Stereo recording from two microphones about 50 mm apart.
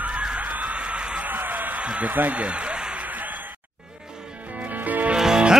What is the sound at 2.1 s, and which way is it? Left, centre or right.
Speech, right.